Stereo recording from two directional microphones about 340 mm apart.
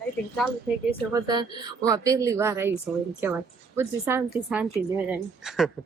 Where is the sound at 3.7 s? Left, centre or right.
Centre.